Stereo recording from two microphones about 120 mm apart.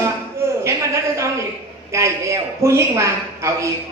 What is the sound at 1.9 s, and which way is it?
A man's voice, 25° right (ahead or behind).